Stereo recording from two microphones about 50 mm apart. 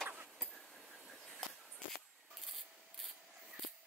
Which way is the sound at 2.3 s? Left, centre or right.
Centre.